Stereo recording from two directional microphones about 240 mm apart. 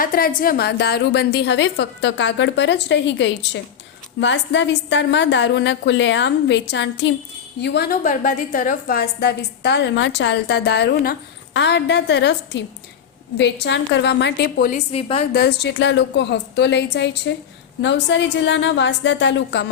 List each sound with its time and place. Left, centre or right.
0.0 s a woman's voice: left
14.8 s a woman's voice: left
15.3 s a woman's voice: left